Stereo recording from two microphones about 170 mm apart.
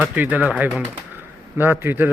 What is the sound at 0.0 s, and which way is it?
Speech, 10° right (ahead or behind).